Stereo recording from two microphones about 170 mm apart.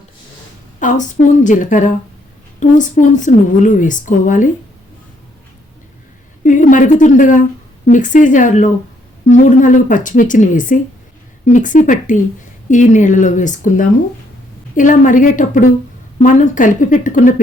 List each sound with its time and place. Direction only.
0.8 s a woman's voice: 50° left (ahead or behind)
6.4 s a sound: 50° left (ahead or behind)
7.9 s a woman's voice: 45° left (ahead or behind)